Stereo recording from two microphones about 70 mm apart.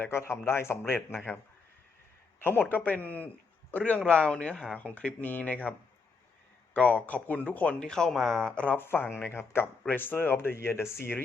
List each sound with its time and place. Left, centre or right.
0.1 s speech: left
2.4 s a man's voice: left
6.7 s speech: left
8.8 s speech: left